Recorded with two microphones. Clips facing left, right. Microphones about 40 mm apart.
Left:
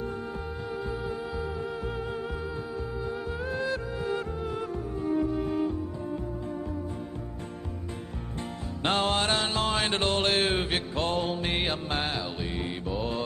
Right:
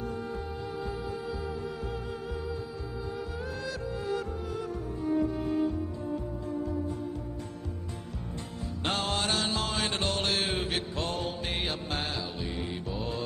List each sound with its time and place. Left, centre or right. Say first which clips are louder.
1.0 s music: left 2 dB; left
8.8 s music: left 5 dB; left